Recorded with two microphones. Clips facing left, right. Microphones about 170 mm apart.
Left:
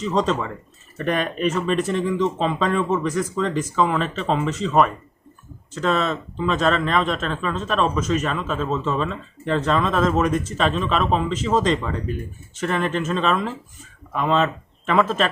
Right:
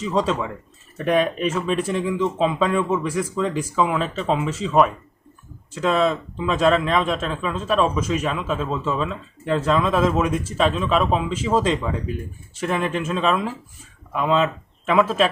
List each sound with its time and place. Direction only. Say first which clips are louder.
0.0 s speech: even; 10° right (ahead or behind)